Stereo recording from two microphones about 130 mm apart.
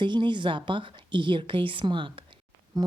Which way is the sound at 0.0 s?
35° right (ahead or behind).